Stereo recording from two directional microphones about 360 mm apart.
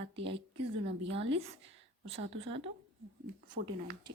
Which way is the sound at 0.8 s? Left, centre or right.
Right.